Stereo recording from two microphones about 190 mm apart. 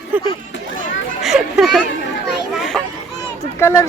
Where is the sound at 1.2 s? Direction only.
Centre (ahead or behind).